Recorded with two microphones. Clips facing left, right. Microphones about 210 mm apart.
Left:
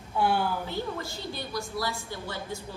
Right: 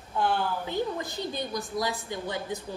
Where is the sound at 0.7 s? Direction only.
20° right (ahead or behind).